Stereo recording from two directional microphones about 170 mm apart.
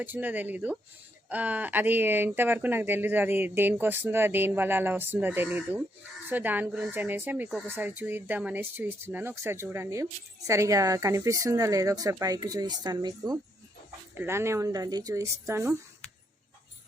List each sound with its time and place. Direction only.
0.0 s speech: 10° right (ahead or behind)